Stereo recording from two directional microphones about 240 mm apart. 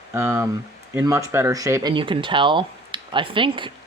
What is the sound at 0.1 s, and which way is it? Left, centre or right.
Speech, centre.